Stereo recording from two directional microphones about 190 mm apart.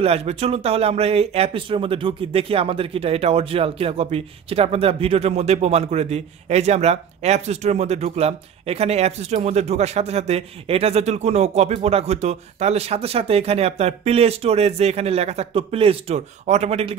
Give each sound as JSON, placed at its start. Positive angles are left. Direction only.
{"t": 0.0, "sound": "speech", "side_deg": -35}